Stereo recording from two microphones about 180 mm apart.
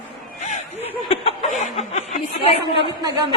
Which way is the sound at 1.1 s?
35° left (ahead or behind).